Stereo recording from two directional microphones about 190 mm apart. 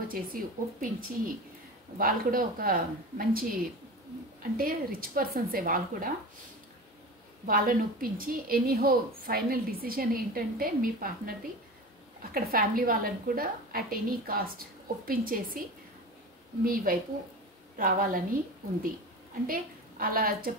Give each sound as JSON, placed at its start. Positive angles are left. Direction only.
{"t": 0.1, "sound": "a woman's voice", "side_deg": -50}
{"t": 4.6, "sound": "a woman's voice", "side_deg": -50}
{"t": 7.4, "sound": "a woman's voice", "side_deg": -50}
{"t": 16.6, "sound": "a woman's voice", "side_deg": -50}